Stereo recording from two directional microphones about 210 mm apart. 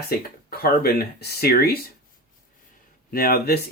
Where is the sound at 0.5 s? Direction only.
45° left (ahead or behind).